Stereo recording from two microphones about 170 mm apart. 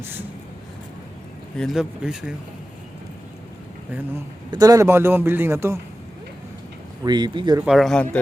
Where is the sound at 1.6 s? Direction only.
Centre (ahead or behind).